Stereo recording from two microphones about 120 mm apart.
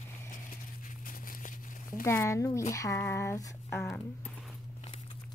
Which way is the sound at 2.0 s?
25° left (ahead or behind).